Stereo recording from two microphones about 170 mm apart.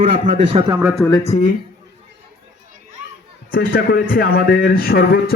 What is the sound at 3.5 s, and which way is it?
A man's voice, 60° left (ahead or behind).